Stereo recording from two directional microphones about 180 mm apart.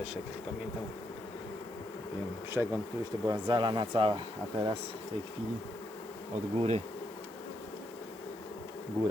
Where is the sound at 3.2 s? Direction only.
25° right (ahead or behind).